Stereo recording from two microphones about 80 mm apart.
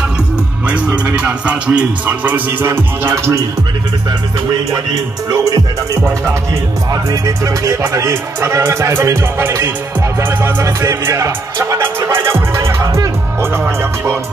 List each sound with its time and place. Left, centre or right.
1.0 s music: centre; by 3.4 s right
5.3 s speech: right
6.9 s speech: right
12.1 s music: right